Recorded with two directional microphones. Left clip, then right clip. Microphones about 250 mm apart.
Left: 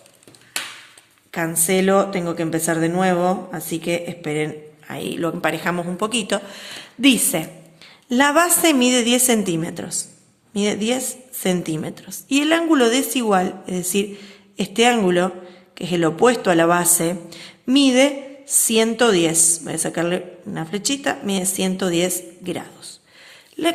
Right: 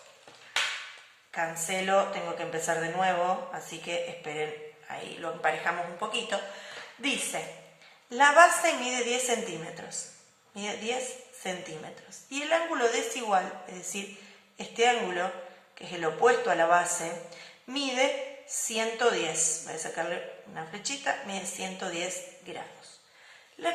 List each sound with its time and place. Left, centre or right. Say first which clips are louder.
1.3 s a woman's voice: left 10 dB; left